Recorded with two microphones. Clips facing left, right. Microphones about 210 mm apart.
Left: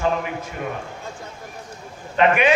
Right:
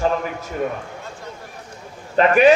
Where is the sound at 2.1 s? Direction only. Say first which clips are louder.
Right 3 dB; 40° right (ahead or behind).